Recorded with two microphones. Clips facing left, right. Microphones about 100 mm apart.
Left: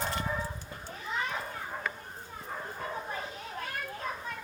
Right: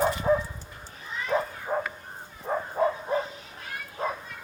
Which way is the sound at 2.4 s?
90° right.